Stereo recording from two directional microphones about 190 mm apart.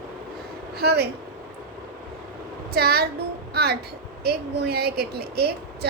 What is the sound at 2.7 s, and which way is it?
A woman's voice, 55° right (ahead or behind).